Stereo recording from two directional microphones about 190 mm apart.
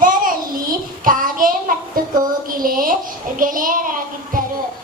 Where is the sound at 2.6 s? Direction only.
50° right (ahead or behind).